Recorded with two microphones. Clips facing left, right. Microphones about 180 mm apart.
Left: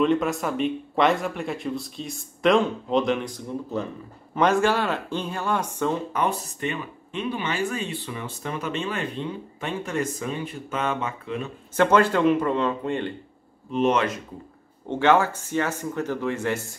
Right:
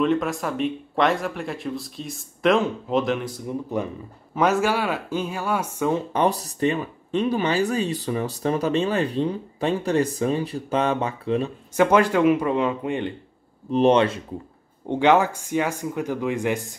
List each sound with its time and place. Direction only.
0.0 s speech: centre (ahead or behind)
4.4 s speech: 5° right (ahead or behind)
6.1 s speech: 35° right (ahead or behind)
11.7 s speech: 10° right (ahead or behind)
13.7 s speech: 35° right (ahead or behind)
14.9 s speech: 15° right (ahead or behind)